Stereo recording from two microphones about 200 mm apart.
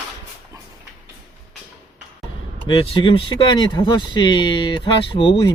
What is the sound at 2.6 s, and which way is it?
Speech, 25° left (ahead or behind).